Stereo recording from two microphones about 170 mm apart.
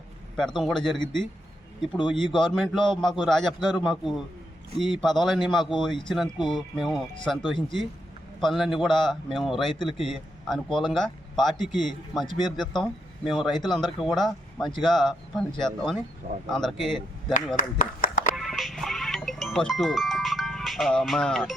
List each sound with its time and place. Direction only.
0.3 s speech: centre (ahead or behind)
2.0 s speech: 30° left (ahead or behind)
2.3 s speech: 5° left (ahead or behind)
12.2 s speech: 25° left (ahead or behind)
12.5 s speech: centre (ahead or behind)
17.6 s speech: 50° left (ahead or behind)
18.3 s music: centre (ahead or behind)